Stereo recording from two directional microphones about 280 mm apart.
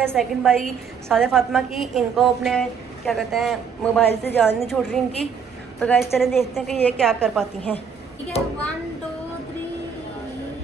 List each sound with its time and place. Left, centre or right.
0.1 s a woman's voice: centre
4.1 s a woman's voice: left
4.4 s a woman's voice: centre